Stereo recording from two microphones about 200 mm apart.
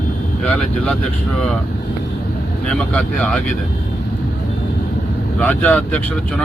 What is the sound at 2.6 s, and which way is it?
Speech, 5° left (ahead or behind).